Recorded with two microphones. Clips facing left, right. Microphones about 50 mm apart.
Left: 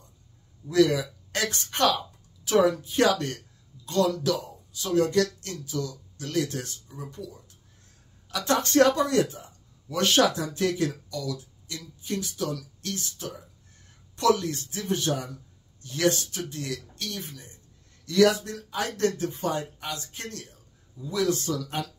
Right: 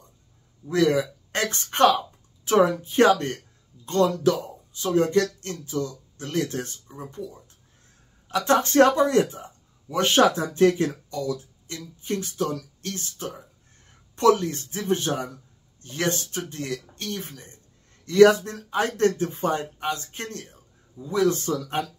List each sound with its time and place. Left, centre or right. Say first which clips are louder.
0.7 s speech: right 1 dB; right